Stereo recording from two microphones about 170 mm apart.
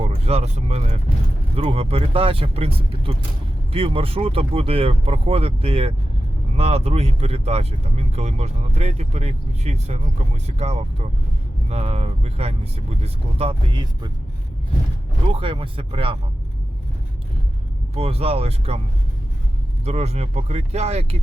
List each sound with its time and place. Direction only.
0.0 s speech: 35° right (ahead or behind)
15.3 s speech: 30° right (ahead or behind)
17.9 s speech: 35° right (ahead or behind)
19.8 s speech: 40° right (ahead or behind)